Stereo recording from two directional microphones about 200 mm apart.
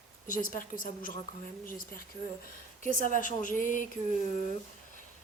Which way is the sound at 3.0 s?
40° left (ahead or behind).